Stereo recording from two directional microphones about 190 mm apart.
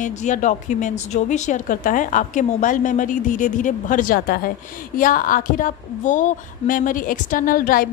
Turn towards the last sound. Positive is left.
turn(degrees=50)  # may be behind; listen again after turning